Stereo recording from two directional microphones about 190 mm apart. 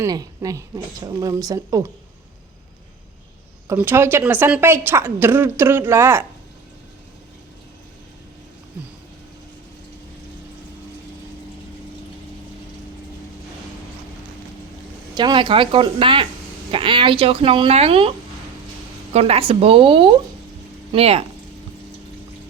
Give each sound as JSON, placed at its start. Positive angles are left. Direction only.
{"t": 0.0, "sound": "a woman's voice", "side_deg": -20}
{"t": 3.7, "sound": "a woman's voice", "side_deg": -10}
{"t": 15.1, "sound": "speech", "side_deg": -25}
{"t": 19.1, "sound": "speech", "side_deg": -30}